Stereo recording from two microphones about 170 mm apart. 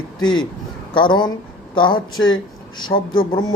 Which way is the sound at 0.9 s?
25° left (ahead or behind).